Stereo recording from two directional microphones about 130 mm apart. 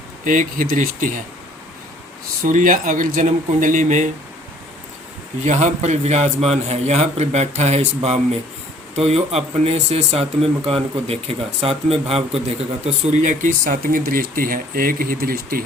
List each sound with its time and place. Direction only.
0.3 s speech: 90° right
2.4 s speech: 90° right; by 4.1 s 75° right (ahead or behind)
5.5 s a man's voice: 65° right (ahead or behind)
12.8 s speech: 65° right (ahead or behind); by 15.2 s 90° right